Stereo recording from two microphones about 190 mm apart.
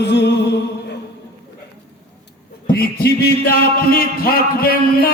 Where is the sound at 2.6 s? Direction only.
55° left (ahead or behind).